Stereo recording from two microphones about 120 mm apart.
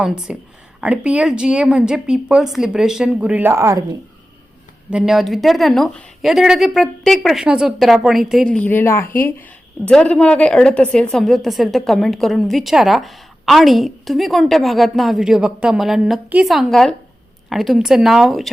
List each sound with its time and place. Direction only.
0.0 s a woman's voice: 5° right (ahead or behind)
3.5 s speech: 25° right (ahead or behind)
4.9 s a woman's voice: 5° right (ahead or behind)
8.5 s a woman's voice: 15° left (ahead or behind); by 18.5 s centre (ahead or behind)